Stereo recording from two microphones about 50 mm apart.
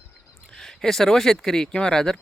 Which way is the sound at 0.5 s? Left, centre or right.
Centre.